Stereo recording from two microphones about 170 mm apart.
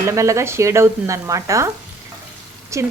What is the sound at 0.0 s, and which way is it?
A woman's voice, 20° right (ahead or behind).